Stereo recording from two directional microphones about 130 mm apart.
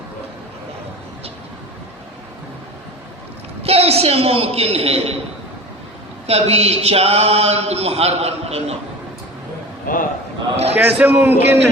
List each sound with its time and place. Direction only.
3.6 s speech: 50° right (ahead or behind)
6.2 s speech: 55° right (ahead or behind)
9.8 s a man's voice: 90° left
10.8 s a man's voice: 15° right (ahead or behind)